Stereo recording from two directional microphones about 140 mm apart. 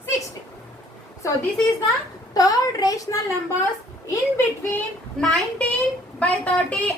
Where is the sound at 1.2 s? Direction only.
20° left (ahead or behind).